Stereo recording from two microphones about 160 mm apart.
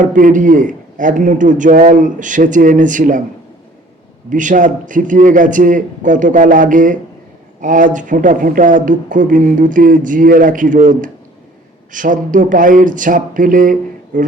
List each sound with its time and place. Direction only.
0.0 s a man's voice: 55° right (ahead or behind)
4.3 s a man's voice: 55° right (ahead or behind)